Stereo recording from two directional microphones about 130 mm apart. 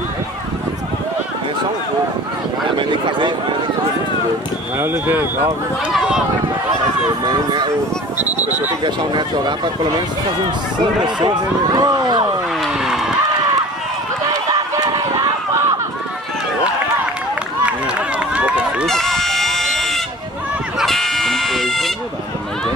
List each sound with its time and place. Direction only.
2.8 s speech: 40° right (ahead or behind)
4.7 s speech: 15° right (ahead or behind)
5.9 s speech: 5° right (ahead or behind)
7.2 s speech: 35° right (ahead or behind)
8.8 s speech: 35° right (ahead or behind)
11.1 s speech: 35° right (ahead or behind)
12.5 s vehicle: centre (ahead or behind)
14.3 s run: 30° right (ahead or behind)
17.6 s run: 10° right (ahead or behind)
18.9 s a sound: 5° left (ahead or behind)